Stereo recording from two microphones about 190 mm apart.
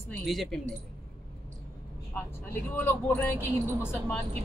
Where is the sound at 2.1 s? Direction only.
10° left (ahead or behind).